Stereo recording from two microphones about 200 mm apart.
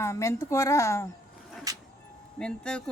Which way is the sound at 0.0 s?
15° left (ahead or behind).